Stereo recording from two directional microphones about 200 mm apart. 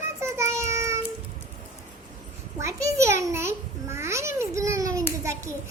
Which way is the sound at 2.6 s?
15° right (ahead or behind).